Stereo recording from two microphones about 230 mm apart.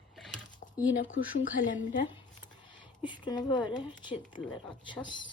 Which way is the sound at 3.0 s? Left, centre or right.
Centre.